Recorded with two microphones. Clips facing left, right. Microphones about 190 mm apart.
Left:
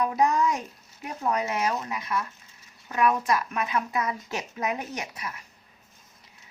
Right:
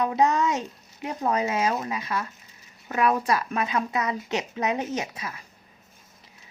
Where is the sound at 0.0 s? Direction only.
20° right (ahead or behind).